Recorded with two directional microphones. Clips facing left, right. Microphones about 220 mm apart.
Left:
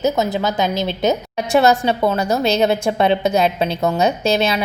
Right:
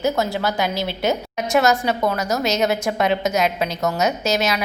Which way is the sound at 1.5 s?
30° left (ahead or behind).